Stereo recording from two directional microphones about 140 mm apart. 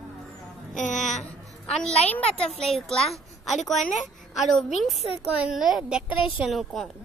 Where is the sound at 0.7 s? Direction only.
60° left (ahead or behind).